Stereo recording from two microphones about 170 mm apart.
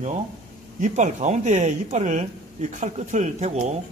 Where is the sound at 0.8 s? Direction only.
45° right (ahead or behind).